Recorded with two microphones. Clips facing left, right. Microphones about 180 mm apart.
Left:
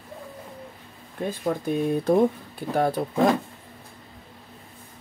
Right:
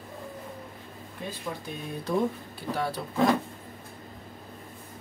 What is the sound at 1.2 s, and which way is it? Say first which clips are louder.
Speech: left 10 dB; 50° left (ahead or behind).